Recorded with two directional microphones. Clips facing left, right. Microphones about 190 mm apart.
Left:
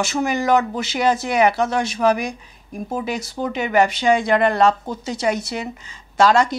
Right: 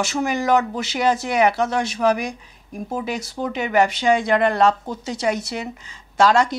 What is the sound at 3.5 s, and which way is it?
Speech, 15° left (ahead or behind).